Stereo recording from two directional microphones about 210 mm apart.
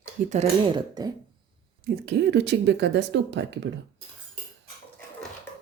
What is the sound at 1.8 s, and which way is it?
Speech, 55° right (ahead or behind).